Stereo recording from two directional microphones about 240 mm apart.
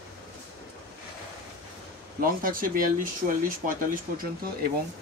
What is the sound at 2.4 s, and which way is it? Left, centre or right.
Speech, right.